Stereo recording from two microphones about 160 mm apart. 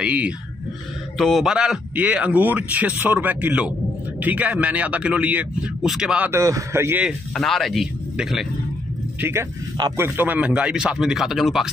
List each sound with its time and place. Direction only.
0.0 s speech: 10° right (ahead or behind)
7.1 s speech: centre (ahead or behind)
9.2 s speech: 15° right (ahead or behind)